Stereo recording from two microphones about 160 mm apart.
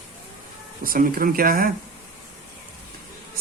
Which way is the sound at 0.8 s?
60° right (ahead or behind).